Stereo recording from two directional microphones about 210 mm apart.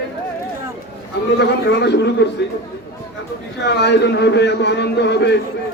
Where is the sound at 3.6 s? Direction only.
55° left (ahead or behind).